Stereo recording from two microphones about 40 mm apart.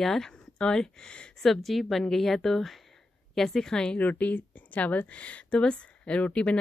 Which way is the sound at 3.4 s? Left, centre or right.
Centre.